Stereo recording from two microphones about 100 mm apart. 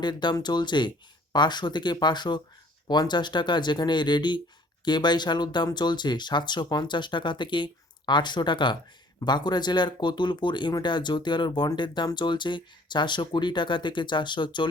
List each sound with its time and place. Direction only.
0.0 s speech: 45° left (ahead or behind)